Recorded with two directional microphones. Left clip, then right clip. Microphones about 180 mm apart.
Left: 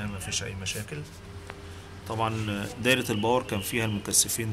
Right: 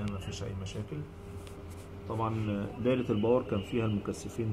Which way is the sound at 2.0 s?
20° left (ahead or behind).